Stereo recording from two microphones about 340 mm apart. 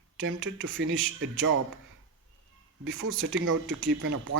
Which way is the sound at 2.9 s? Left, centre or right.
Right.